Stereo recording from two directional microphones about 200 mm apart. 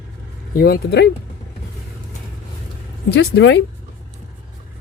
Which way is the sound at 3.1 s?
60° left (ahead or behind).